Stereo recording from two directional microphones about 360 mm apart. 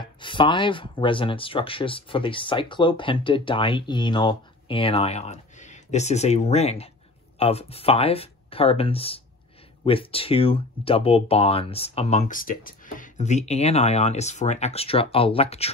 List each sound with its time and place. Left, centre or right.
0.0 s speech: centre